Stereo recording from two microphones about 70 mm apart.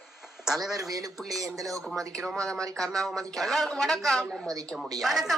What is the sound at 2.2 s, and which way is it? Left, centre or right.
A woman's voice, centre.